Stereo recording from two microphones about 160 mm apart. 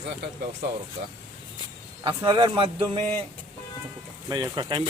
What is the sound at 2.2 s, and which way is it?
Music, 30° right (ahead or behind).